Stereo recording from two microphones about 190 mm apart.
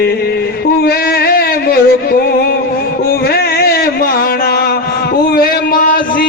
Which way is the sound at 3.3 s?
55° left (ahead or behind).